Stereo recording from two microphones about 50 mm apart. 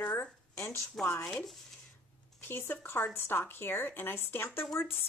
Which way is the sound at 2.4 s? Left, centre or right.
Left.